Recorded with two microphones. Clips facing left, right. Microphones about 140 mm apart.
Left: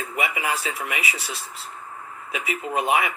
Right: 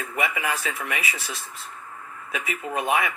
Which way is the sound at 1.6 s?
30° left (ahead or behind).